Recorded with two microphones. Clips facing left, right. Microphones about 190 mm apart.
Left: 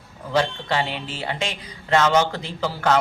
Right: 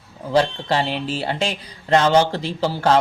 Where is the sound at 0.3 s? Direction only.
35° right (ahead or behind).